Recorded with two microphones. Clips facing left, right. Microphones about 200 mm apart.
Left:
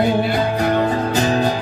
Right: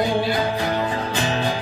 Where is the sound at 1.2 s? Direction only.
40° left (ahead or behind).